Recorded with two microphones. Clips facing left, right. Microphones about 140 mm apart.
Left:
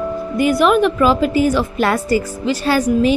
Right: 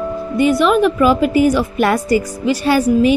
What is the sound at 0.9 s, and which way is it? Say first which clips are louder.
A woman's voice: right 2 dB; 10° right (ahead or behind).